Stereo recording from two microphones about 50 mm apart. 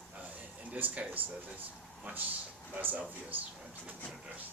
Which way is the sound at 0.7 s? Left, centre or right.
Right.